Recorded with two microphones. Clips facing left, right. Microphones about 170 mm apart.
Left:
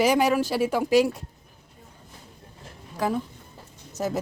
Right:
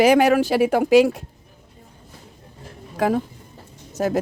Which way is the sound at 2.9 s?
60° right (ahead or behind).